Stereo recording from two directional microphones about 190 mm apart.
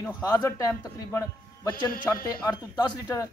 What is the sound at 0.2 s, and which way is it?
A man's voice, 20° left (ahead or behind).